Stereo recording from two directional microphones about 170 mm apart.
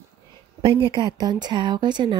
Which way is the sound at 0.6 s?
30° right (ahead or behind).